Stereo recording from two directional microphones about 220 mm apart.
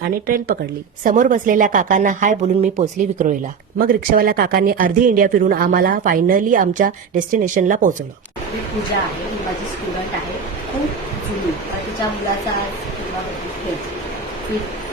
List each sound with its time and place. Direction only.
0.3 s speech: 40° right (ahead or behind)